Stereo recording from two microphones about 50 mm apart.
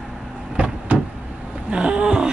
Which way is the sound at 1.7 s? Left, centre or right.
Centre.